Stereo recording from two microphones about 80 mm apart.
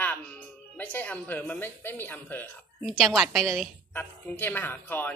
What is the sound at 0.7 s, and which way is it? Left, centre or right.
Speech, centre.